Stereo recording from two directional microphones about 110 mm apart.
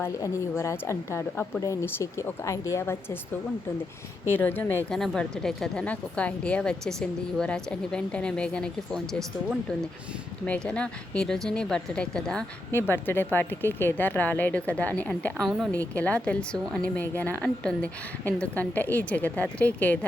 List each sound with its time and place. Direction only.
0.2 s a woman's voice: 25° left (ahead or behind)
4.3 s a woman's voice: 20° left (ahead or behind)
4.9 s a woman's voice: 5° left (ahead or behind)
10.4 s a woman's voice: 10° left (ahead or behind)
12.9 s a woman's voice: 20° left (ahead or behind)
15.4 s a woman's voice: centre (ahead or behind)
15.7 s a woman's voice: 15° left (ahead or behind)